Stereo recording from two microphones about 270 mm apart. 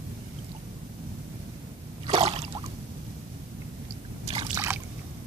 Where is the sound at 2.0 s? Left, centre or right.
Right.